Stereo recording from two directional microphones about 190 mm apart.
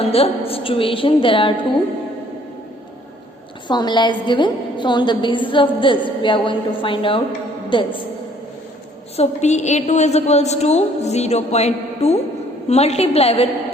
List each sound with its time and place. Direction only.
0.0 s a woman's voice: 30° left (ahead or behind)
3.7 s a woman's voice: 25° left (ahead or behind)
9.1 s a woman's voice: 35° left (ahead or behind)